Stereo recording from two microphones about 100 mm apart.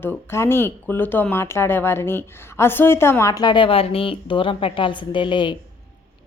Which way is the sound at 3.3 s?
50° left (ahead or behind).